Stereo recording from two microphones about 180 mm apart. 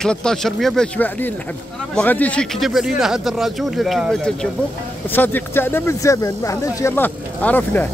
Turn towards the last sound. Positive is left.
turn(degrees=10)  # may be behind; listen again after turning